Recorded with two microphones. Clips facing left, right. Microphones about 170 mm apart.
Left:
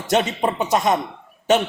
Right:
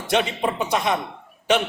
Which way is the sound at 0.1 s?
45° left (ahead or behind).